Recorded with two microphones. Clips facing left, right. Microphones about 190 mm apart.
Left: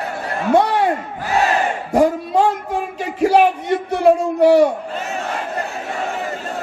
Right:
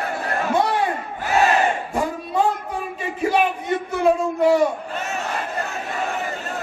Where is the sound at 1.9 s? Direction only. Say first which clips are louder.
Left 8 dB; 75° left (ahead or behind).